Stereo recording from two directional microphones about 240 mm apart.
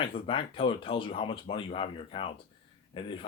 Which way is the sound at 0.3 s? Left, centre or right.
Left.